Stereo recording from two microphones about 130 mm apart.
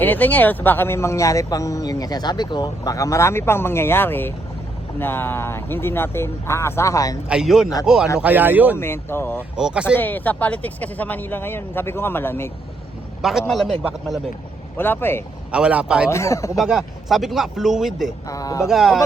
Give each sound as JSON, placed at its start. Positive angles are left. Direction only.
{"t": 0.0, "sound": "speech", "side_deg": 15}
{"t": 7.3, "sound": "speech", "side_deg": -5}
{"t": 8.2, "sound": "speech", "side_deg": -15}
{"t": 8.8, "sound": "speech", "side_deg": 20}
{"t": 9.6, "sound": "speech", "side_deg": -5}
{"t": 9.9, "sound": "speech", "side_deg": 15}
{"t": 13.5, "sound": "speech", "side_deg": 0}
{"t": 14.8, "sound": "speech", "side_deg": 15}
{"t": 15.5, "sound": "speech", "side_deg": -10}
{"t": 16.0, "sound": "speech", "side_deg": 20}
{"t": 16.6, "sound": "speech", "side_deg": 0}
{"t": 18.3, "sound": "speech", "side_deg": 25}
{"t": 18.7, "sound": "speech", "side_deg": 0}